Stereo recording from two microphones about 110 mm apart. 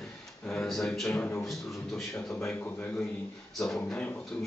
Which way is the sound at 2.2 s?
5° left (ahead or behind).